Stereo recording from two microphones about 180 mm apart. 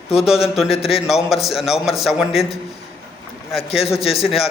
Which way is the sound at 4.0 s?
35° left (ahead or behind).